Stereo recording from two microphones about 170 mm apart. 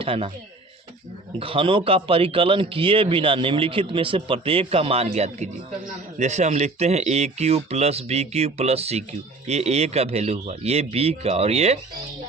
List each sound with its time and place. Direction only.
0.0 s speech: 35° right (ahead or behind)
1.4 s a man's voice: 30° right (ahead or behind)